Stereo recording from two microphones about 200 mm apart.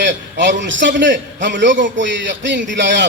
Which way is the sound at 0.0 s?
65° right (ahead or behind).